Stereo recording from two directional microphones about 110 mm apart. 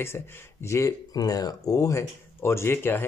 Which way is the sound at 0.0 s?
20° left (ahead or behind).